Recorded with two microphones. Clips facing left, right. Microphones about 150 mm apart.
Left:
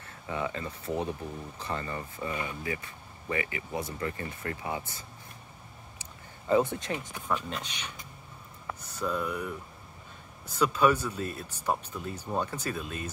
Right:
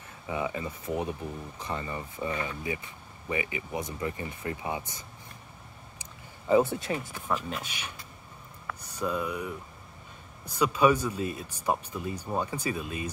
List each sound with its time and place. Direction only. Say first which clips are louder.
0.3 s speech: right 2 dB; 10° right (ahead or behind)
6.4 s speech: right 2 dB; 5° right (ahead or behind)